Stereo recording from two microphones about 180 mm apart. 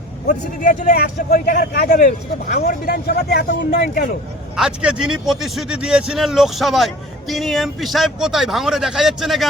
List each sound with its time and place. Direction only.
0.6 s speech: 45° left (ahead or behind); by 4.1 s 65° left (ahead or behind)
4.5 s speech: 5° right (ahead or behind)